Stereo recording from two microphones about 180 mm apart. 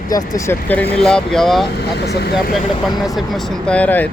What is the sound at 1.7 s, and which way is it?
Speech, 65° left (ahead or behind).